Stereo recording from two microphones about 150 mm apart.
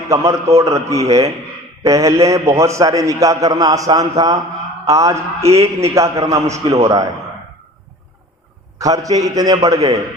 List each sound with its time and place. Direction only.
0.1 s a man's voice: 20° right (ahead or behind)
8.8 s a man's voice: 25° right (ahead or behind)